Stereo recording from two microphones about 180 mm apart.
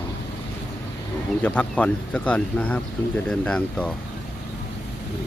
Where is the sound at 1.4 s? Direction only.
10° left (ahead or behind).